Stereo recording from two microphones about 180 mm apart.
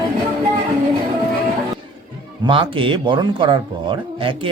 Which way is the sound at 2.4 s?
30° right (ahead or behind).